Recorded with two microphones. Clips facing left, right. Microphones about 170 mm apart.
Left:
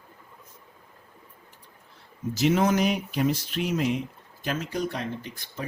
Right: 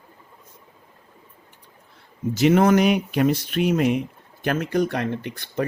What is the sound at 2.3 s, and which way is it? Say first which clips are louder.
Speech: right 6 dB; 65° right (ahead or behind).